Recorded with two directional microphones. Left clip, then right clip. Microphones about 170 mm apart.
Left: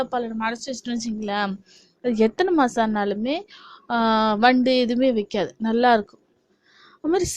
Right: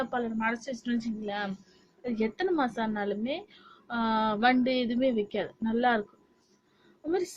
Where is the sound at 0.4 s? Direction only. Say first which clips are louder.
Left 4 dB; 30° left (ahead or behind).